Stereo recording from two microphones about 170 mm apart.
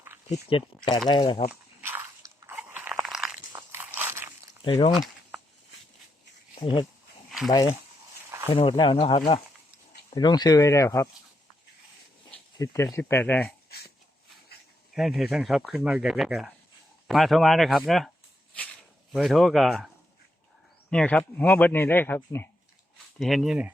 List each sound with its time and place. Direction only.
0.3 s speech: 35° left (ahead or behind)
1.8 s biting: 15° right (ahead or behind)
3.5 s walk: 15° right (ahead or behind)
4.6 s speech: 35° left (ahead or behind)
4.9 s a sound: 5° right (ahead or behind)
6.6 s speech: 30° left (ahead or behind)
7.3 s a sound: centre (ahead or behind)
7.5 s a man's voice: 25° left (ahead or behind)
12.5 s a man's voice: 20° left (ahead or behind)
14.9 s speech: centre (ahead or behind)
19.1 s speech: centre (ahead or behind)
20.9 s a man's voice: 5° left (ahead or behind)
23.1 s speech: centre (ahead or behind)